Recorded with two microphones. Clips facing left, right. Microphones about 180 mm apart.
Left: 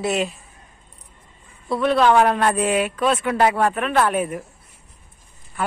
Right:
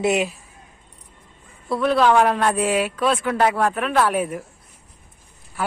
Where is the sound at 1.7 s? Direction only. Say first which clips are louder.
Even; centre (ahead or behind).